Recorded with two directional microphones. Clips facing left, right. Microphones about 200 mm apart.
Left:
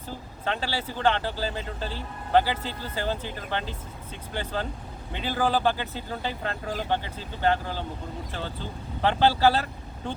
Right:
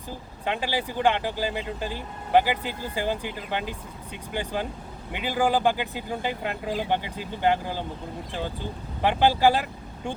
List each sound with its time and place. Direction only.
0.4 s speech: 15° right (ahead or behind)